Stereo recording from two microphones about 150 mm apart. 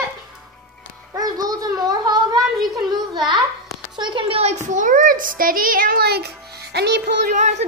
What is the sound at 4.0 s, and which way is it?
A child's voice, 35° right (ahead or behind).